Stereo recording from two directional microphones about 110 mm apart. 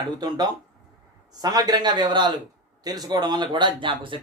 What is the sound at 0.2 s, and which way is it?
A man's voice, 35° right (ahead or behind).